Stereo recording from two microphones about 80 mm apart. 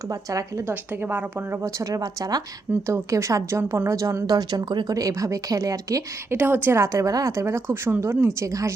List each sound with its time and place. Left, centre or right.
0.1 s speech: right
0.7 s a woman's voice: right
1.6 s speech: right
2.8 s a woman's voice: right
4.9 s speech: right
6.3 s a woman's voice: right